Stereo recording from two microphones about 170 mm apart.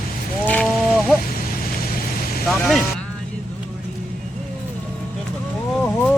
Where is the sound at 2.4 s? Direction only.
Centre (ahead or behind).